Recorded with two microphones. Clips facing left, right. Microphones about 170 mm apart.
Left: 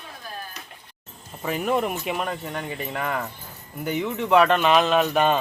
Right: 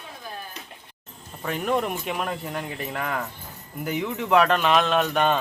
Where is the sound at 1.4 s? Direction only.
5° left (ahead or behind).